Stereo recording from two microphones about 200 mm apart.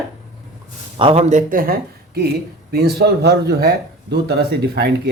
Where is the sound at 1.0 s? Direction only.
30° right (ahead or behind).